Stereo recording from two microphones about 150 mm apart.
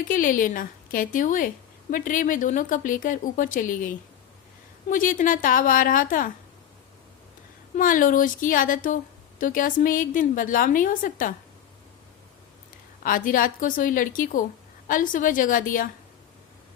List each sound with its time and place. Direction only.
0.1 s a woman's voice: 65° left (ahead or behind)
4.9 s a woman's voice: 65° left (ahead or behind)
7.8 s a woman's voice: 65° left (ahead or behind)
13.0 s a woman's voice: 65° left (ahead or behind)